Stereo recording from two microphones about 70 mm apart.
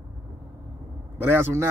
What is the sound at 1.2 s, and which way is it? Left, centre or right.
Speech, right.